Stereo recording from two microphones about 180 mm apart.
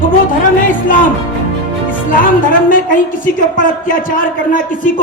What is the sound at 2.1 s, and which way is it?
A man's voice, 50° left (ahead or behind).